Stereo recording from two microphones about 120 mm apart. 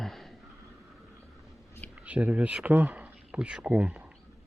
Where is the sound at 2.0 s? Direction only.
10° right (ahead or behind).